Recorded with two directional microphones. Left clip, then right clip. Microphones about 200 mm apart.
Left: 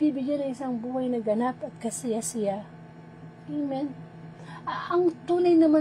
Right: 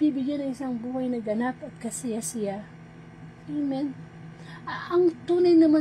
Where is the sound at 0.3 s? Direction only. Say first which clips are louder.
Left 2 dB; 20° left (ahead or behind).